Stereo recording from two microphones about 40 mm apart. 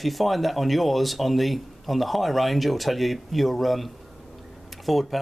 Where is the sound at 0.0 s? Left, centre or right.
Centre.